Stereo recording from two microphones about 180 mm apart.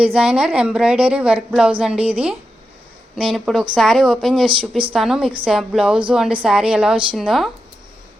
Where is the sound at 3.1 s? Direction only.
Centre (ahead or behind).